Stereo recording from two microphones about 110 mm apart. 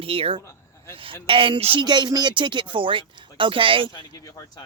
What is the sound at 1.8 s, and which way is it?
Speech, 40° right (ahead or behind).